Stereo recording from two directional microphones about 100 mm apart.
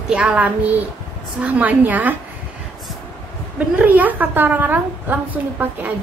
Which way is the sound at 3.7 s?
15° right (ahead or behind).